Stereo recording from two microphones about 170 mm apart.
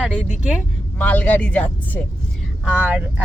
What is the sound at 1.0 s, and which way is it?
Speech, 10° left (ahead or behind).